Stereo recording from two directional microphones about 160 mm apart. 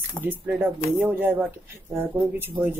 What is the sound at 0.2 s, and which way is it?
Speech, 10° right (ahead or behind).